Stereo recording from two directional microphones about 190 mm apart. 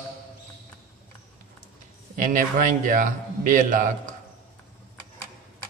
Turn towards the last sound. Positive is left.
turn(degrees=-40)  # may be behind; listen again after turning